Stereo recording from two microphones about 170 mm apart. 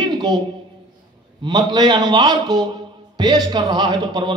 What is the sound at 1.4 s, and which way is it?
A man's voice, 25° right (ahead or behind).